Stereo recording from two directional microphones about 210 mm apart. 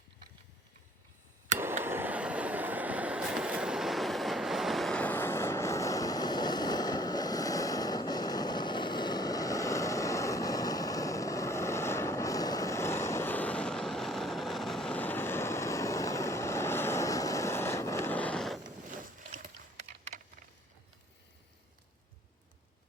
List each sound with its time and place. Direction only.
1.5 s vehicle: 10° right (ahead or behind)
18.9 s boat: 40° right (ahead or behind)
19.9 s a sound: 40° right (ahead or behind)